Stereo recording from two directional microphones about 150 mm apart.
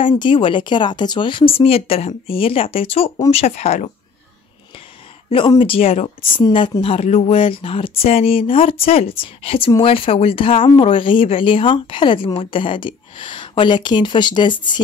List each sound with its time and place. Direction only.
0.0 s speech: 35° left (ahead or behind)
5.6 s speech: 40° left (ahead or behind)